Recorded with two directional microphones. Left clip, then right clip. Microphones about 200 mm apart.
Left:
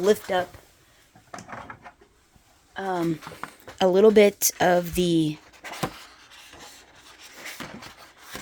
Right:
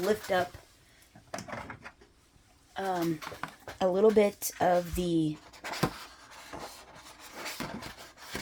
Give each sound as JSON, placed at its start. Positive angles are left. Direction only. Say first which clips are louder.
{"t": 0.0, "sound": "speech", "louder": "left 6 dB", "side_deg": 50}
{"t": 2.7, "sound": "speech", "louder": "left 4 dB", "side_deg": 45}
{"t": 5.6, "sound": "pant", "louder": "left 1 dB", "side_deg": 15}
{"t": 7.4, "sound": "a sound", "louder": "left 1 dB", "side_deg": 10}